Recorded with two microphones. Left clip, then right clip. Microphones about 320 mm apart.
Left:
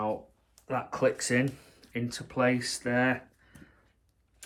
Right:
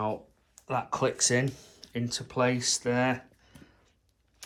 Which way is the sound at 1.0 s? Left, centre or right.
Centre.